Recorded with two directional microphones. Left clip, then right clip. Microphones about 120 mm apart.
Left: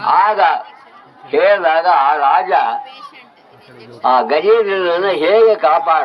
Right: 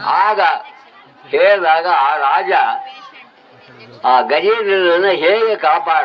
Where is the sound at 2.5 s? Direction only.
20° right (ahead or behind).